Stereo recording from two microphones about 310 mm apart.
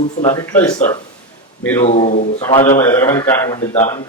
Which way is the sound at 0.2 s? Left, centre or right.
Centre.